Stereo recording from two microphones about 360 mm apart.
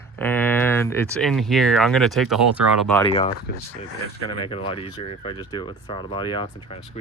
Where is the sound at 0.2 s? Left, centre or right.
Centre.